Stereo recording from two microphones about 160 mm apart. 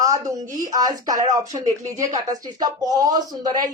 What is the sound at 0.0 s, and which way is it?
Speech, 20° right (ahead or behind).